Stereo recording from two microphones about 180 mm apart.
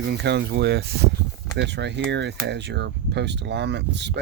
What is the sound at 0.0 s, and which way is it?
Speech, 70° right (ahead or behind).